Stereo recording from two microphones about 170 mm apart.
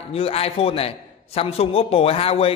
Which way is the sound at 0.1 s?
35° left (ahead or behind).